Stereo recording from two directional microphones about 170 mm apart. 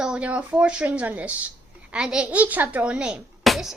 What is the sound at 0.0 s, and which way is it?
Speech, 5° right (ahead or behind).